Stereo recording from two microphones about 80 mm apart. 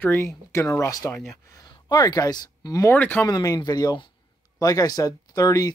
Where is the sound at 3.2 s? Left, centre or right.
Left.